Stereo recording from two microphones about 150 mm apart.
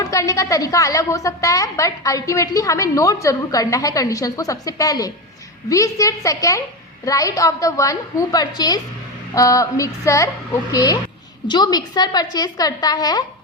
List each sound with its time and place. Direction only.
0.0 s a woman's voice: 20° left (ahead or behind)